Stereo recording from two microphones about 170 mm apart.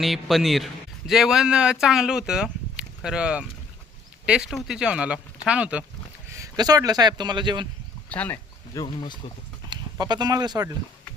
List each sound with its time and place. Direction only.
0.0 s a man's voice: centre (ahead or behind)
6.2 s speech: 20° right (ahead or behind)
8.1 s speech: 10° left (ahead or behind)
8.7 s speech: 30° left (ahead or behind)
9.6 s speech: 25° right (ahead or behind)